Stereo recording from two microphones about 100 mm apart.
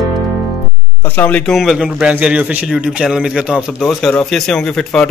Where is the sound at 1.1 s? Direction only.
15° left (ahead or behind).